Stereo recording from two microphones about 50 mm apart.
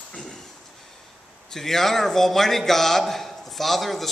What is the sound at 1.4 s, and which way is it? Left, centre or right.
Speech, centre.